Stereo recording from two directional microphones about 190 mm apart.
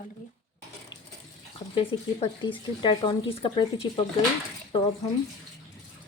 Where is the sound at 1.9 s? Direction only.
25° left (ahead or behind).